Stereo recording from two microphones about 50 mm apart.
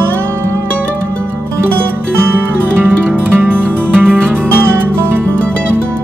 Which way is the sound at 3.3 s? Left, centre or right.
Right.